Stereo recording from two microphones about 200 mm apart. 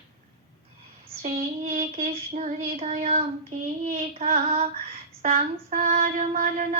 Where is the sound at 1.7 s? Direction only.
40° right (ahead or behind).